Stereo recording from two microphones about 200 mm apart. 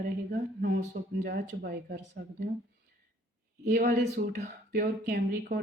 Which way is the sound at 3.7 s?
50° right (ahead or behind).